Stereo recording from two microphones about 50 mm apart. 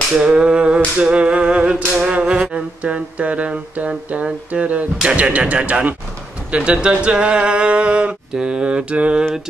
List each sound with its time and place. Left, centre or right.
0.2 s speech: centre
2.0 s mantra: right
4.5 s speech: right